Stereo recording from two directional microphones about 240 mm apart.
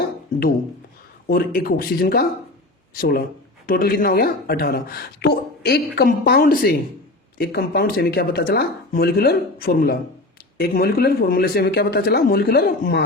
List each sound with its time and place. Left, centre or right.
1.3 s speech: left